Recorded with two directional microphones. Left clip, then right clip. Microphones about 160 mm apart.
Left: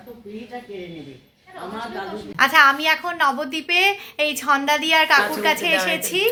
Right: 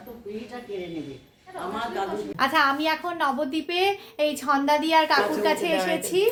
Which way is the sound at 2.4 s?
10° left (ahead or behind).